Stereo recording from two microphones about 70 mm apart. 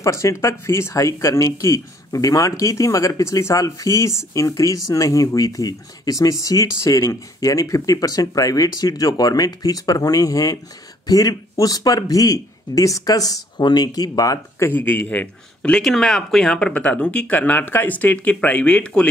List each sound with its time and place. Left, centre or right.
0.0 s speech: left
14.6 s speech: left
15.8 s speech: centre